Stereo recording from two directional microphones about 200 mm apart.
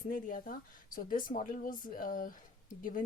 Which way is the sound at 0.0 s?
45° left (ahead or behind).